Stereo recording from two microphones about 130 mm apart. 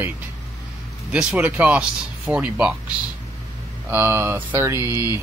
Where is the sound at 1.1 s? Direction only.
10° right (ahead or behind).